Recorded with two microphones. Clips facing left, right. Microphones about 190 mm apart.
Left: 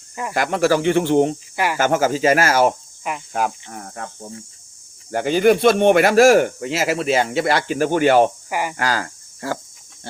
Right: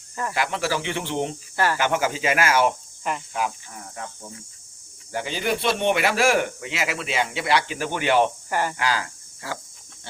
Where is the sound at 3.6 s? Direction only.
55° left (ahead or behind).